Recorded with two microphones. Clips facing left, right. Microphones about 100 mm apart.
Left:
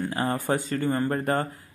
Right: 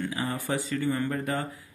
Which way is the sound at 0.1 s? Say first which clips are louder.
Left 4 dB; 45° left (ahead or behind).